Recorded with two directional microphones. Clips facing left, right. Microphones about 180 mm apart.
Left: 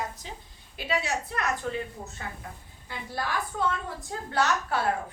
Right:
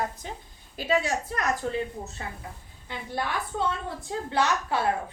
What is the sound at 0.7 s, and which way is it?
A woman's voice, 45° right (ahead or behind).